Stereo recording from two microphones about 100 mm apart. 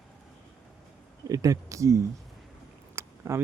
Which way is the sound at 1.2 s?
35° right (ahead or behind).